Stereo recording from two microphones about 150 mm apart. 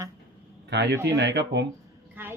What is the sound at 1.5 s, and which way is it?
Speech, 90° right.